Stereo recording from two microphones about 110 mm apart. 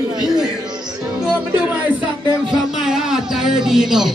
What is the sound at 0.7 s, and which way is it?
Music, 40° right (ahead or behind).